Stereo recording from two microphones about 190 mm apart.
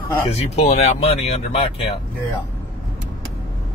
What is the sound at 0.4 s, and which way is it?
Speech, 35° left (ahead or behind).